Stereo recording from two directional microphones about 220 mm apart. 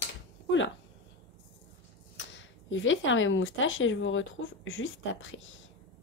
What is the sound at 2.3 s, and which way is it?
Speech, 60° left (ahead or behind).